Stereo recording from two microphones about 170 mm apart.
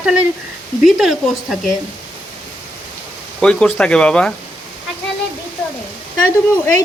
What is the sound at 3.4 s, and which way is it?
Speech, 5° left (ahead or behind).